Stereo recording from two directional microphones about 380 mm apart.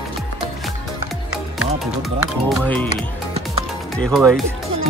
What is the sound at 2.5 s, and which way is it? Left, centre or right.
Speech, centre.